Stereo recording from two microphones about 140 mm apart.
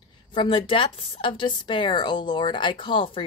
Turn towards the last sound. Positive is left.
turn(degrees=40)  # may be behind; listen again after turning